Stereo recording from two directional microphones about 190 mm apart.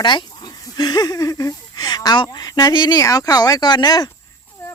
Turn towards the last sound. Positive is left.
turn(degrees=20)  # may be behind; listen again after turning